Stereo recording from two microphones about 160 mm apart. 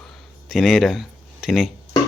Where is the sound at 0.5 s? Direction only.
Centre (ahead or behind).